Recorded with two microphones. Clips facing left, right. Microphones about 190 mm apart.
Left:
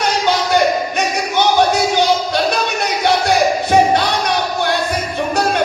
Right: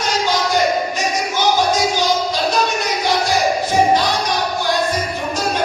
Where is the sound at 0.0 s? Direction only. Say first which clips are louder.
Left 2 dB; 65° left (ahead or behind).